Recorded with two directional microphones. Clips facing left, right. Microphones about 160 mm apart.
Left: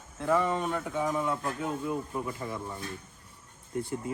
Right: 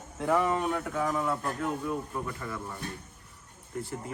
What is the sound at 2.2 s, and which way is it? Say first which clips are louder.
Speech: left 1 dB; 20° left (ahead or behind).